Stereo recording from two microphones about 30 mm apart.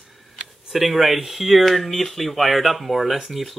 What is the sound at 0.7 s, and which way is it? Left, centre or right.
Speech, centre.